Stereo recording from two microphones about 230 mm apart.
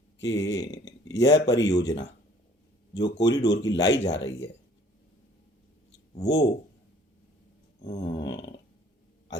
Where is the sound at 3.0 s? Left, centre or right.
Centre.